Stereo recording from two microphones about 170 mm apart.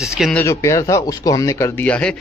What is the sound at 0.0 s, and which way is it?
Speech, centre (ahead or behind).